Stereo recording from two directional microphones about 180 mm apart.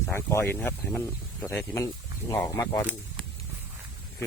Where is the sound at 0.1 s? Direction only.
15° left (ahead or behind).